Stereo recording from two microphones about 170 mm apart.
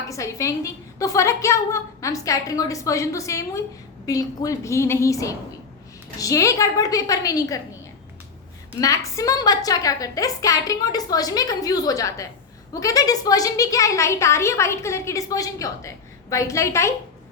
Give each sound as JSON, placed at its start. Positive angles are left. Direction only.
{"t": 0.1, "sound": "a woman's voice", "side_deg": 20}
{"t": 8.8, "sound": "a woman's voice", "side_deg": 20}